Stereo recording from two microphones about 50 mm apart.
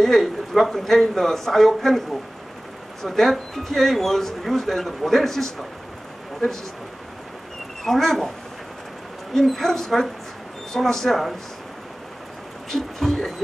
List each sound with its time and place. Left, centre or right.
0.0 s speech: centre
7.8 s speech: centre
9.3 s speech: centre
12.7 s speech: centre